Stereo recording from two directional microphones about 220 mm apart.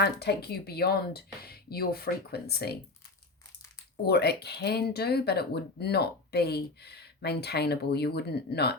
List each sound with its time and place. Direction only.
0.0 s speech: 50° left (ahead or behind)
4.0 s speech: 45° left (ahead or behind)